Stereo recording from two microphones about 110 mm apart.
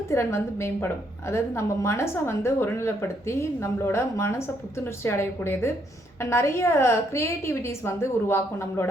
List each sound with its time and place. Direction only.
0.1 s a woman's voice: 25° left (ahead or behind)